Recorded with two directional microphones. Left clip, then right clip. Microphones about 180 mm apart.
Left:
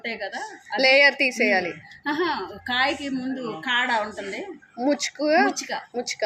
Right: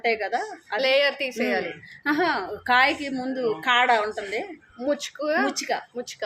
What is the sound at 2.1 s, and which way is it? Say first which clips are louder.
A woman's voice: right 2 dB; 65° right (ahead or behind).